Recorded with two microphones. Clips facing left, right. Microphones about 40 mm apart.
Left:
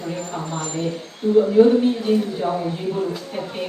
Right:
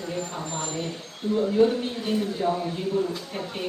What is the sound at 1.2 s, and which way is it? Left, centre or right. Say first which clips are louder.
Speech: left 7 dB; centre.